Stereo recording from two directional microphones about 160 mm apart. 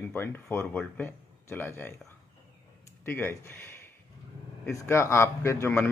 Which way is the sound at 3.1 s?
15° left (ahead or behind).